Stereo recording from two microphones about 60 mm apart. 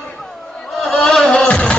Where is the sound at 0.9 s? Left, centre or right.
Centre.